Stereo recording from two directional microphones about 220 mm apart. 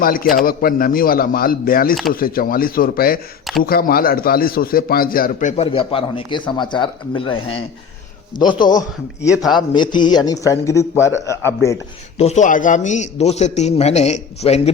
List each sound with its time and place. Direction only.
0.0 s a man's voice: 40° left (ahead or behind); by 8.8 s 20° left (ahead or behind)
9.2 s a man's voice: centre (ahead or behind)
9.6 s a man's voice: 20° left (ahead or behind)
12.1 s a man's voice: 30° left (ahead or behind)